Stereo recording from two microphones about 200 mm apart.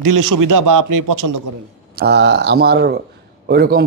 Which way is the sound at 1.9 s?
55° right (ahead or behind).